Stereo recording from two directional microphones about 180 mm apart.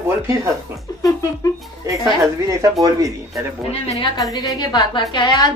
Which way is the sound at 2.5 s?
20° right (ahead or behind).